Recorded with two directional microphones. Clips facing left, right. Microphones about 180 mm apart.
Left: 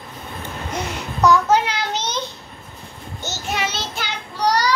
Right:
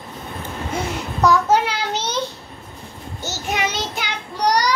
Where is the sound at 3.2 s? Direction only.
10° right (ahead or behind).